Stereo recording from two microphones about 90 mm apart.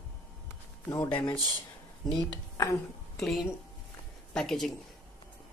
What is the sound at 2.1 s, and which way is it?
Speech, 45° left (ahead or behind).